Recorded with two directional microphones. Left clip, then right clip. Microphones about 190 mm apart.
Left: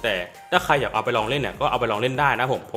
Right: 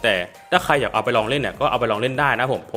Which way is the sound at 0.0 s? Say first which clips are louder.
Right 5 dB; 25° right (ahead or behind).